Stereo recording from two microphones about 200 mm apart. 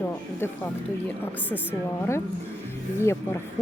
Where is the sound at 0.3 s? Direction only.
10° left (ahead or behind).